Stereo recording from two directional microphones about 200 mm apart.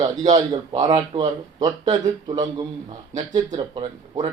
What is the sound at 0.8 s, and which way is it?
Speech, 20° right (ahead or behind).